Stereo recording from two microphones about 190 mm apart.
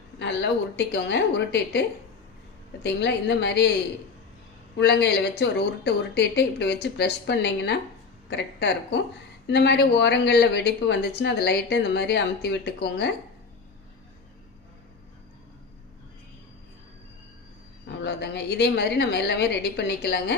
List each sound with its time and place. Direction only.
0.2 s speech: 60° left (ahead or behind)
2.8 s speech: 65° left (ahead or behind)
4.8 s speech: 60° left (ahead or behind)
17.8 s speech: 65° left (ahead or behind)